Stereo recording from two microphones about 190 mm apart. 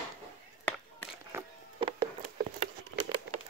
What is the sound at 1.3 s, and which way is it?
Insect, 10° right (ahead or behind).